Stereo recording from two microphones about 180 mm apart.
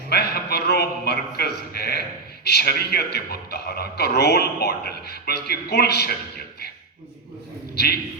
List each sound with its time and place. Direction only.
0.1 s a man's voice: 60° left (ahead or behind)